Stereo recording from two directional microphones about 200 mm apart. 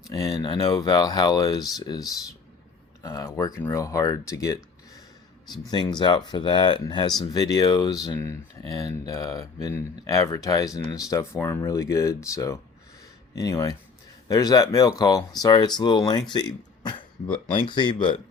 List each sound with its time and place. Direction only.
0.1 s speech: 20° left (ahead or behind)